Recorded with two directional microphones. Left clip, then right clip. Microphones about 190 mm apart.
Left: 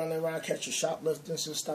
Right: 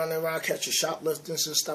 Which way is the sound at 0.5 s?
50° right (ahead or behind).